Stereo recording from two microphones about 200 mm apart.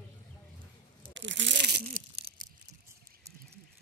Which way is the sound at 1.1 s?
65° right (ahead or behind).